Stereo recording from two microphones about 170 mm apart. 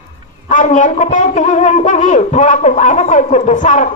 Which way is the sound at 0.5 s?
45° left (ahead or behind).